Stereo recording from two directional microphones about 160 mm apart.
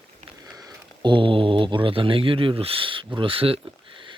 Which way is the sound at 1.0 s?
30° right (ahead or behind).